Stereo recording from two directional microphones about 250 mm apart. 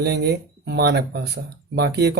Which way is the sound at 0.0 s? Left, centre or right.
Right.